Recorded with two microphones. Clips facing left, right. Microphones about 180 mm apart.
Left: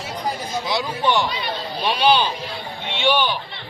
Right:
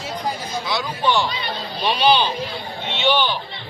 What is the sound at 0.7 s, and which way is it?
Speech, 20° left (ahead or behind).